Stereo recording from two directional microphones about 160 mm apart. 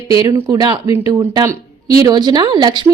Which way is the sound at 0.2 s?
25° right (ahead or behind).